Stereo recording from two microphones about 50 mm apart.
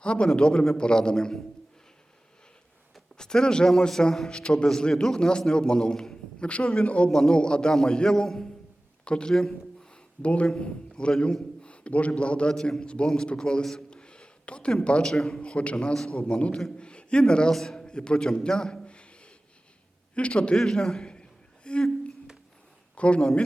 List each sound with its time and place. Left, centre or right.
0.0 s a man's voice: left
3.2 s a man's voice: centre
7.1 s a man's voice: centre
9.3 s a sound: centre
9.9 s a sound: left
10.5 s a man's voice: centre
15.0 s a man's voice: centre
15.4 s a man's voice: left
17.5 s a man's voice: centre
17.7 s a sound: centre
20.1 s a man's voice: left
20.6 s a sound: centre
23.0 s a man's voice: left